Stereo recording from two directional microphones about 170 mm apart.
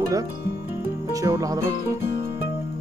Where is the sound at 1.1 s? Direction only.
20° right (ahead or behind).